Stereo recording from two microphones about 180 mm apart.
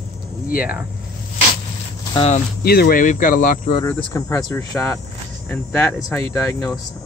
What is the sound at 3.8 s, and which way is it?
Speech, 15° left (ahead or behind).